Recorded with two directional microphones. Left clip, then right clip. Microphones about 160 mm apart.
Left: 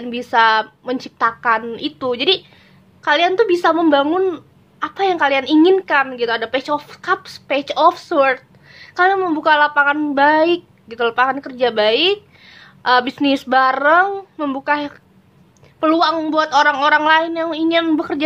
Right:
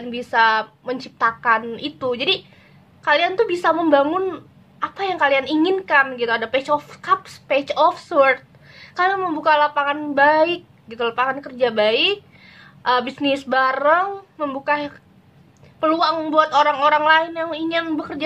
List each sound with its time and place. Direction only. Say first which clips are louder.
0.1 s speech: left 3 dB; 40° left (ahead or behind)